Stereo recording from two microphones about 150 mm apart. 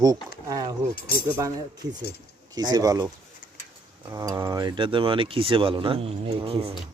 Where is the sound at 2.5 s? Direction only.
25° right (ahead or behind).